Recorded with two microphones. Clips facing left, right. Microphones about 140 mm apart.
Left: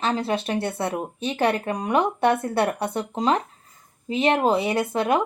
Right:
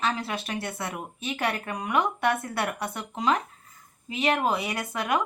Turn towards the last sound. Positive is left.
turn(degrees=30)  # may be behind; listen again after turning